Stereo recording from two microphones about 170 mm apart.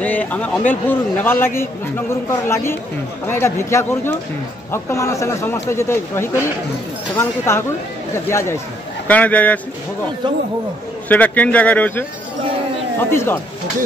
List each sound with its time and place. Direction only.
0.0 s a man's voice: 10° left (ahead or behind)
11.1 s a man's voice: 10° left (ahead or behind)
13.1 s a man's voice: 15° left (ahead or behind)